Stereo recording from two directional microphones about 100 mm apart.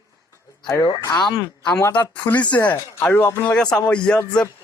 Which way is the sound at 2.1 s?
15° left (ahead or behind).